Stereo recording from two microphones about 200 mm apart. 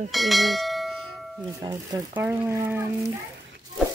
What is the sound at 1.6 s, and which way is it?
Speech, 20° right (ahead or behind).